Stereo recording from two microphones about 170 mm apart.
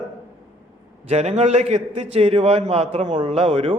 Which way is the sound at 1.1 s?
40° right (ahead or behind).